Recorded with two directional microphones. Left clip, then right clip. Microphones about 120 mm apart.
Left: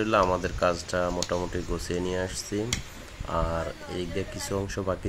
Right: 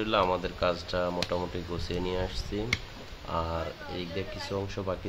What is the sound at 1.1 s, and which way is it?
Speech, 25° left (ahead or behind).